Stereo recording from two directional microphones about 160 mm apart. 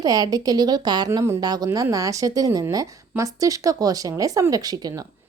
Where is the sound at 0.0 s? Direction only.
25° right (ahead or behind).